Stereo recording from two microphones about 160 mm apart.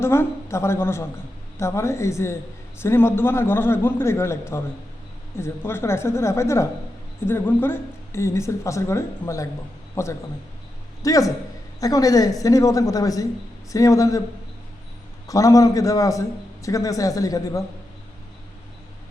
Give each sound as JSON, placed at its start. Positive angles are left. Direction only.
{"t": 0.0, "sound": "a woman's voice", "side_deg": 15}
{"t": 15.3, "sound": "a woman's voice", "side_deg": 20}